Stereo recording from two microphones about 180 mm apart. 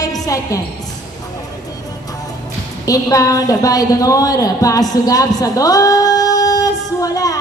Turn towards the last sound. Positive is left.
turn(degrees=20)  # may be behind; listen again after turning